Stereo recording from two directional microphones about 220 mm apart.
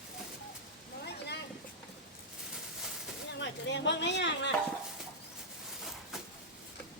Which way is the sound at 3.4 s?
55° left (ahead or behind).